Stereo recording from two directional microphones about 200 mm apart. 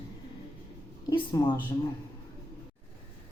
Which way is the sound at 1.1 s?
25° left (ahead or behind).